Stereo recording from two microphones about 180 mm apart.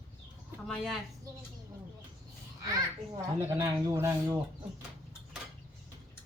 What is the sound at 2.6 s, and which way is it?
A child's voice, 20° right (ahead or behind).